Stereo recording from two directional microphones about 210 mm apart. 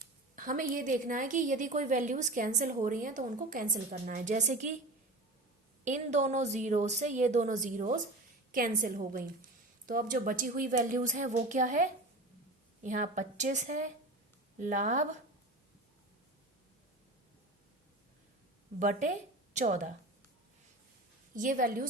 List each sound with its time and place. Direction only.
0.3 s a sound: 40° right (ahead or behind)
0.7 s a woman's voice: 40° right (ahead or behind)
5.8 s a woman's voice: 35° right (ahead or behind)
18.8 s a woman's voice: 35° right (ahead or behind)
21.3 s a woman's voice: 40° right (ahead or behind)